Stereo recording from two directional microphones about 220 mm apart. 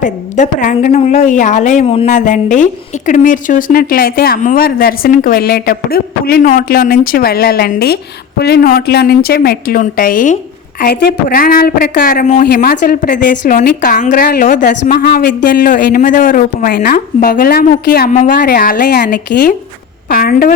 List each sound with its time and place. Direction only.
0.0 s a woman's voice: 35° left (ahead or behind)